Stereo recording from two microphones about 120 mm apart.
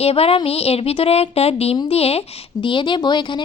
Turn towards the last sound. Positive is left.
turn(degrees=40)  # may be behind; listen again after turning